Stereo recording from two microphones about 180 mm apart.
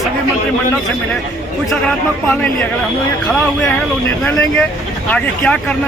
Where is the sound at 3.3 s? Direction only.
Centre (ahead or behind).